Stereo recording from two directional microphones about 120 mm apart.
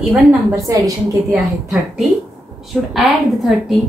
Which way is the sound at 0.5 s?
25° right (ahead or behind).